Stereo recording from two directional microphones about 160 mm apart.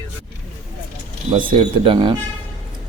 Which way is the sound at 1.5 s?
35° right (ahead or behind).